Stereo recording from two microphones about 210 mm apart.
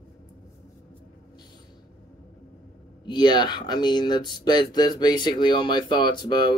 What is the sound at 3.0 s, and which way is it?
Speech, 20° left (ahead or behind).